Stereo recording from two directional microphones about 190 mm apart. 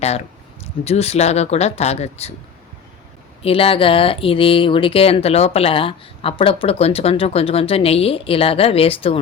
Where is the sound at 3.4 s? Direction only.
30° left (ahead or behind).